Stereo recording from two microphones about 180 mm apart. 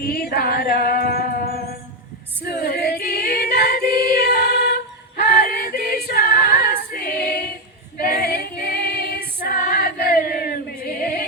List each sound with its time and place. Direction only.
0.1 s a sound: 60° left (ahead or behind)
2.5 s female singing: 60° left (ahead or behind)
4.0 s music: 60° left (ahead or behind)
5.7 s a capella: 55° left (ahead or behind)
7.9 s female singing: 60° left (ahead or behind)
9.5 s choir: 55° left (ahead or behind)